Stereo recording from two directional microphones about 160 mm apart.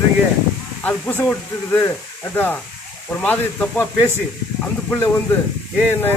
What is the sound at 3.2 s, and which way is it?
Speech, 10° left (ahead or behind).